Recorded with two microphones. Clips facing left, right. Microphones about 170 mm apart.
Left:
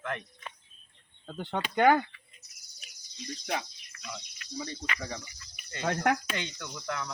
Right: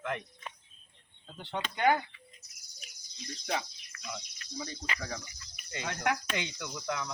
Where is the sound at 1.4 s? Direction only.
50° left (ahead or behind).